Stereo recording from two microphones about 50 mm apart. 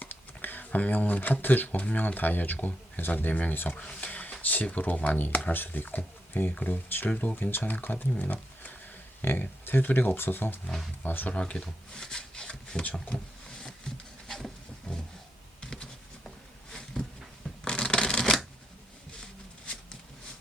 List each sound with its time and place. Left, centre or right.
0.0 s speech: left
3.8 s speech: left
4.1 s speech: left
8.2 s roaring cats: left
9.2 s speech: left
11.5 s speech: centre
13.6 s a sound: centre
15.6 s computer keyboard: centre
16.7 s a sound: centre